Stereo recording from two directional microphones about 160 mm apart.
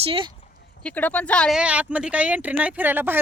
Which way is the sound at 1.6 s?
10° right (ahead or behind).